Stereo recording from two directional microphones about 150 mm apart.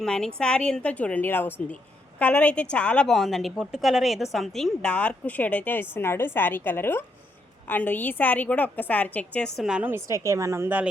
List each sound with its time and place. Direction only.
0.0 s a woman's voice: 5° left (ahead or behind)
9.6 s a woman's voice: 5° right (ahead or behind)